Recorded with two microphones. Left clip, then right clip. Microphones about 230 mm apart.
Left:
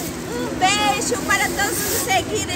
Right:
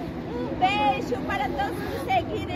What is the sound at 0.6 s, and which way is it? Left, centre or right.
Speech, centre.